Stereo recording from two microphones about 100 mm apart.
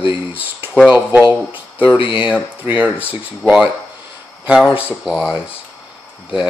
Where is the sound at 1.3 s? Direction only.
15° right (ahead or behind).